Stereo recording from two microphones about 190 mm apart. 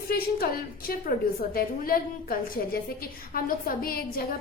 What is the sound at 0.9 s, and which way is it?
A woman's voice, 50° left (ahead or behind).